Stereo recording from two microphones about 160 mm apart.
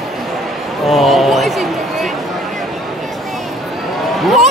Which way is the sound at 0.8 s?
Centre (ahead or behind).